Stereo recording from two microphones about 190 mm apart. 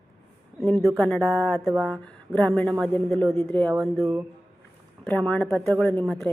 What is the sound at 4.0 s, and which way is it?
Speech, 15° right (ahead or behind).